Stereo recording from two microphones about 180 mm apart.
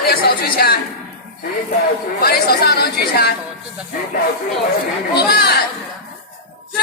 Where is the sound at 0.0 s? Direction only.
55° left (ahead or behind).